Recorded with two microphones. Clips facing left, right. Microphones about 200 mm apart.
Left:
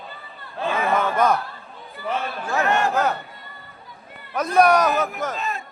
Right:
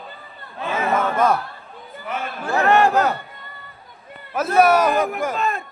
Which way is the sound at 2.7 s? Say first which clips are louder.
Right 7 dB; 60° right (ahead or behind).